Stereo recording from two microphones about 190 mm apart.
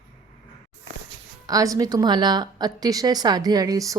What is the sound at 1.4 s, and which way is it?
A woman's voice, 20° right (ahead or behind).